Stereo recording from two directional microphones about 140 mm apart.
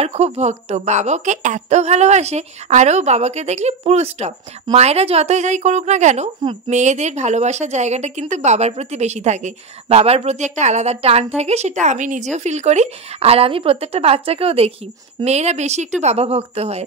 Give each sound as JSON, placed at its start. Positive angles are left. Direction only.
{"t": 0.0, "sound": "a woman's voice", "side_deg": -50}